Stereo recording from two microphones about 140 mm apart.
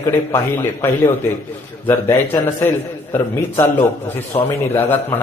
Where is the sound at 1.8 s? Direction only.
20° left (ahead or behind).